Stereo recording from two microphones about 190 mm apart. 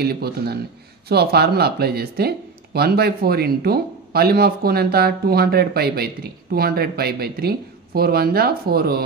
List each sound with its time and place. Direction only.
0.0 s speech: 55° right (ahead or behind)